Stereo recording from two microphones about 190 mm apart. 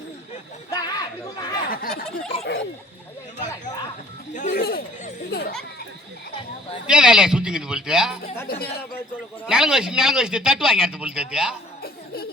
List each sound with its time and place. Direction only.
0.7 s a sound: 20° left (ahead or behind)
1.7 s speech: 50° left (ahead or behind)
2.4 s speech: 60° left (ahead or behind)
4.4 s chatter: 45° left (ahead or behind)
6.8 s a man's voice: 5° right (ahead or behind)
8.4 s speech: 55° left (ahead or behind)
9.5 s a man's voice: 5° right (ahead or behind)
11.8 s laughter: 55° left (ahead or behind)